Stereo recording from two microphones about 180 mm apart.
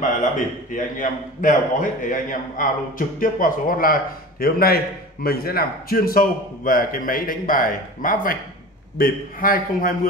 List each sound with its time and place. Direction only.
0.7 s a man's voice: 45° left (ahead or behind)